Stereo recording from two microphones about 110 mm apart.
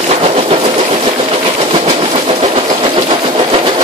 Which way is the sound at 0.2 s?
60° right (ahead or behind).